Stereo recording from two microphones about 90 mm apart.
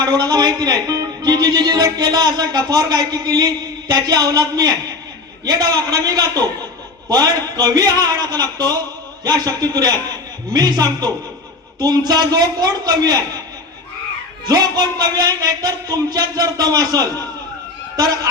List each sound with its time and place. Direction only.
0.0 s speech: 50° right (ahead or behind)
14.4 s speech: 45° right (ahead or behind)